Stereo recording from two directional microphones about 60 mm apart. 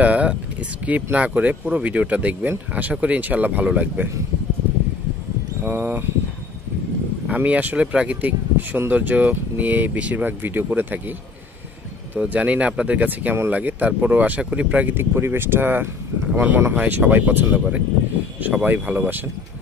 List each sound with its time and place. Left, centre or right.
0.0 s speech: right
5.6 s speech: right
7.2 s speech: right
12.2 s speech: right
15.0 s speech: right